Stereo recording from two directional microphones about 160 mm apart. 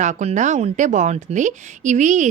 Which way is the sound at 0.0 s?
45° right (ahead or behind).